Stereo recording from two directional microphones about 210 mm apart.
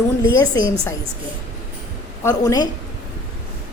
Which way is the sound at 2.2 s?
15° left (ahead or behind).